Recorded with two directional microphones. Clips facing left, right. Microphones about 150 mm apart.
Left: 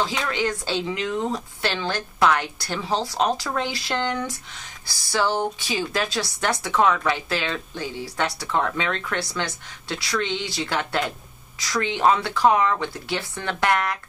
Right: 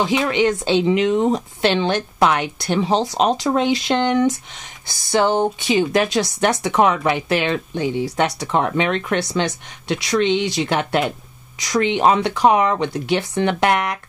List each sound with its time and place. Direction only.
0.0 s speech: 20° right (ahead or behind)